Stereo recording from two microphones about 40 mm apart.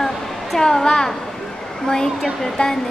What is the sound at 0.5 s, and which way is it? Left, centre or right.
A woman's voice, centre.